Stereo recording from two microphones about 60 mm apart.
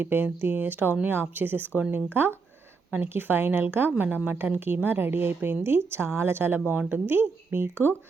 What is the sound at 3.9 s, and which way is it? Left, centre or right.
A woman's voice, right.